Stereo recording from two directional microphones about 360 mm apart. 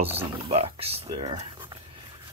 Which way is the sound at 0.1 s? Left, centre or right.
Centre.